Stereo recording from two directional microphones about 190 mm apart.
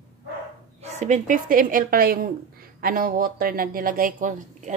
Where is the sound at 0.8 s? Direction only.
35° right (ahead or behind).